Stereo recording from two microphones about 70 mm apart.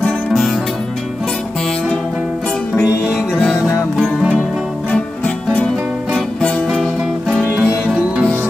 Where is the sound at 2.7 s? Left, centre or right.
Left.